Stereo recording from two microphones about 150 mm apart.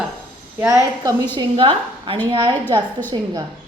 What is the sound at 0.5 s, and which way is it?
Speech, 20° right (ahead or behind).